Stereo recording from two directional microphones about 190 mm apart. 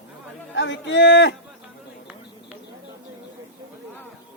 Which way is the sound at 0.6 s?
70° left (ahead or behind).